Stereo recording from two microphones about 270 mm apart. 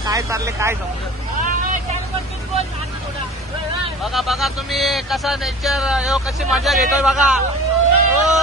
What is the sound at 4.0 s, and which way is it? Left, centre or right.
Speech, centre.